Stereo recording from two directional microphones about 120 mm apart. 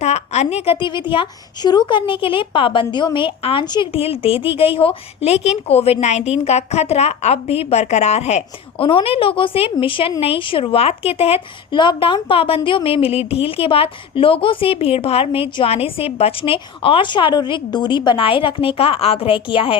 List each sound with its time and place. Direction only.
0.0 s a woman's voice: 65° left (ahead or behind)
8.9 s speech: 50° left (ahead or behind)